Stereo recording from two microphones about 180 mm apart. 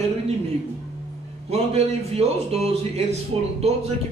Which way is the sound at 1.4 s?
35° right (ahead or behind).